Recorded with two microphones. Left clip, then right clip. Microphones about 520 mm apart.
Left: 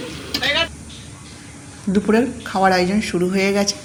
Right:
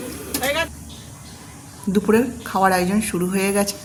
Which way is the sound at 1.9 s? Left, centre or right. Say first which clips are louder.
Left 1 dB; right.